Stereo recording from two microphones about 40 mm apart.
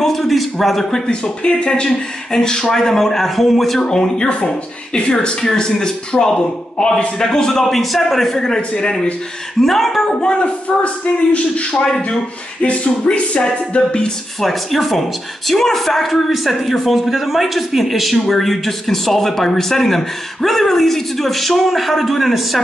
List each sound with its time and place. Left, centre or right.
0.0 s speech: centre
1.2 s a man's voice: left; by 3.8 s centre
3.8 s a man's voice: centre
7.6 s a man's voice: centre
8.5 s a man's voice: left
9.6 s speech: centre
10.1 s a man's voice: left
14.4 s a man's voice: centre